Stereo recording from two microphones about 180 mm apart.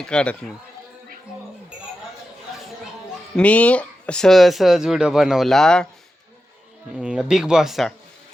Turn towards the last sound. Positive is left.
turn(degrees=0)  # may be behind; listen again after turning